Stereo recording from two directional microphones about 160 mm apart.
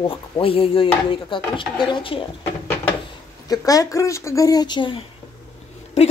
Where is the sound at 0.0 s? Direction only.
35° left (ahead or behind).